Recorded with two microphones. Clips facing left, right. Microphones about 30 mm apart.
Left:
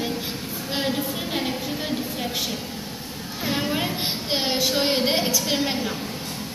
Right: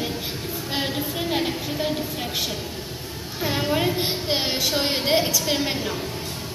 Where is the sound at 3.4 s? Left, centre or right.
Centre.